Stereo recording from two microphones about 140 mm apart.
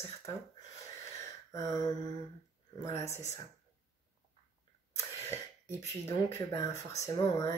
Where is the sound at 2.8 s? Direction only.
20° left (ahead or behind).